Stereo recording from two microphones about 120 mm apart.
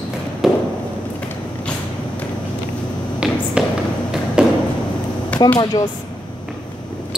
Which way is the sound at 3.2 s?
10° right (ahead or behind).